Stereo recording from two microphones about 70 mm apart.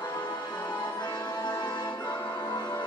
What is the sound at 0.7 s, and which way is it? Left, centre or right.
Music, left.